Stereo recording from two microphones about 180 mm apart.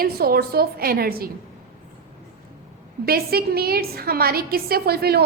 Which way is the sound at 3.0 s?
60° right (ahead or behind).